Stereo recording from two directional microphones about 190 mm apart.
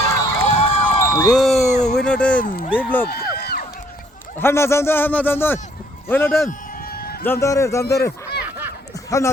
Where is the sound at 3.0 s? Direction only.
55° left (ahead or behind).